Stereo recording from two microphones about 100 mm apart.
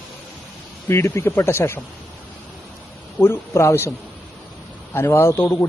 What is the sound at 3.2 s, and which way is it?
Speech, 25° left (ahead or behind).